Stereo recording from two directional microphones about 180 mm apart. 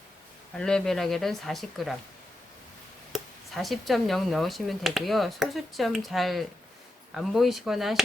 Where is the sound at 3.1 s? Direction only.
Centre (ahead or behind).